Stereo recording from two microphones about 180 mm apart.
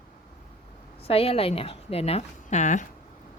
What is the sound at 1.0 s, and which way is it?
A woman's voice, 35° left (ahead or behind).